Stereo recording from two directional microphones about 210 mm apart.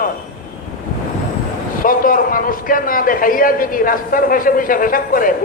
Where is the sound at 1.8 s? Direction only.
40° left (ahead or behind).